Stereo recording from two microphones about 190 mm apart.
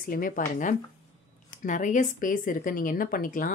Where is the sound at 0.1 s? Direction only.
45° left (ahead or behind).